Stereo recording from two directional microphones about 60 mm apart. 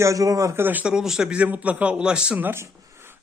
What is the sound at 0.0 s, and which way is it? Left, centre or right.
Speech, right.